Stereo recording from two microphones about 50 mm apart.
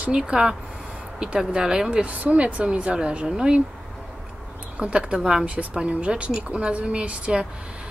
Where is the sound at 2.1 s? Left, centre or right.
Right.